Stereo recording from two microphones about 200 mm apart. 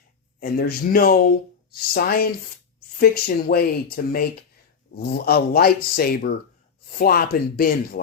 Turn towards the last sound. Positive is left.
turn(degrees=50)  # may be behind; listen again after turning